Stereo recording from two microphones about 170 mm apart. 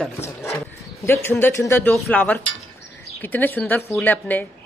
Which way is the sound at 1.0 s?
15° left (ahead or behind).